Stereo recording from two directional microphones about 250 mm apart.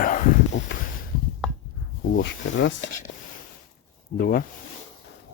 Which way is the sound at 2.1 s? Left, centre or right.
Left.